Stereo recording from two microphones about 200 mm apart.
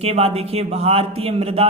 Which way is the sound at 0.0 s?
30° right (ahead or behind).